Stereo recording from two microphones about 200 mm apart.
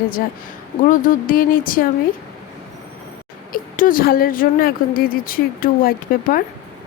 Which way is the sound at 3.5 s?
45° left (ahead or behind).